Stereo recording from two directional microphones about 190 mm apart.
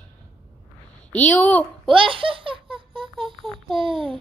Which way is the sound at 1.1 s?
5° left (ahead or behind).